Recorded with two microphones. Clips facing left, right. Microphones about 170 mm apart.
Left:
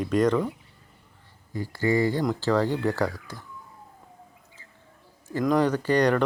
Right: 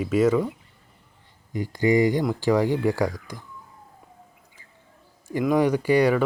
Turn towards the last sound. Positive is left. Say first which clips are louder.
# right 2 dB
turn(degrees=-10)  # may be behind; listen again after turning